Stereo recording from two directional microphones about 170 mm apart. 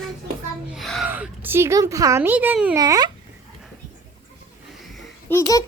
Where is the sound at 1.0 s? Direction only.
10° right (ahead or behind).